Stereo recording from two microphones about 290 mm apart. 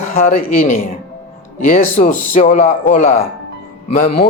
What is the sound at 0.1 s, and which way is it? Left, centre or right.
Speech, left.